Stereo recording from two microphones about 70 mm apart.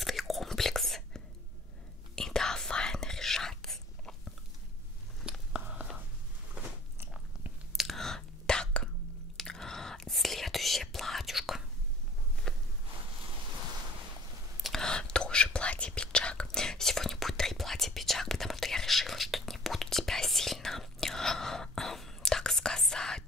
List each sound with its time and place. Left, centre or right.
0.0 s whispering: centre
5.5 s whispering: centre
7.7 s whispering: centre
12.5 s walk: centre
14.6 s whispering: centre